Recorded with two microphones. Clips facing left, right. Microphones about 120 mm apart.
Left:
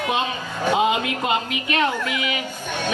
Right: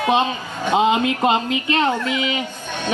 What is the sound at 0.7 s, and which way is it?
A woman's voice, 25° right (ahead or behind).